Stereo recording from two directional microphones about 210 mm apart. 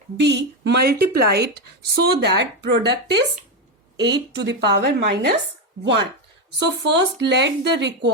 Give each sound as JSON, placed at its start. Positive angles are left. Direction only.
{"t": 0.2, "sound": "speech", "side_deg": -55}
{"t": 4.4, "sound": "a woman's voice", "side_deg": -50}